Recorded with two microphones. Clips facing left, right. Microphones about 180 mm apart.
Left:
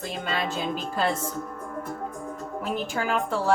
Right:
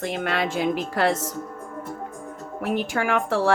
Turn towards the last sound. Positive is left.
turn(degrees=-85)